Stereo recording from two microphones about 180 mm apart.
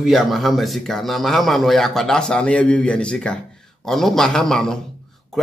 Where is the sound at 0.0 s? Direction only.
Centre (ahead or behind).